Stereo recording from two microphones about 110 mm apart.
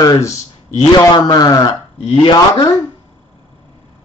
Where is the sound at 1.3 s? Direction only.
35° left (ahead or behind).